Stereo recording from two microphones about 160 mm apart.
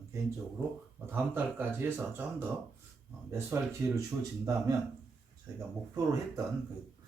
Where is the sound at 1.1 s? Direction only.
10° right (ahead or behind).